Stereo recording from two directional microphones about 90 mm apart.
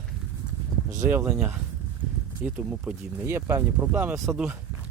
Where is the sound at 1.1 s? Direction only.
20° right (ahead or behind).